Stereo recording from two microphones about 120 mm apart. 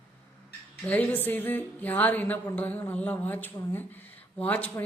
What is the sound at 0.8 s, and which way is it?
Speech, 15° left (ahead or behind).